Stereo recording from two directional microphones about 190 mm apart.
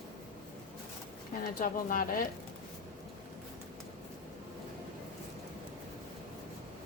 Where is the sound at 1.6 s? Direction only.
45° left (ahead or behind).